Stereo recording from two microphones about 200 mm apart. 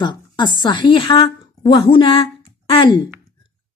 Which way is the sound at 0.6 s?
20° left (ahead or behind).